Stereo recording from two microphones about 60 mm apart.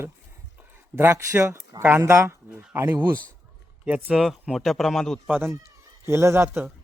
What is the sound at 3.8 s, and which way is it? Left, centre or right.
Speech, right.